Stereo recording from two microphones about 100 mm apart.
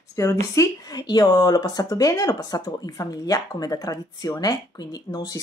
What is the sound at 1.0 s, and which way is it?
Speech, 45° left (ahead or behind).